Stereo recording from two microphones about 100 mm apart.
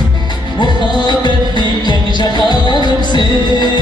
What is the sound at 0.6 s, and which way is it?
Music, 50° left (ahead or behind).